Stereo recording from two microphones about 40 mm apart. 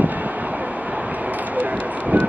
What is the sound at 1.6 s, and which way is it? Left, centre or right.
Speech, right.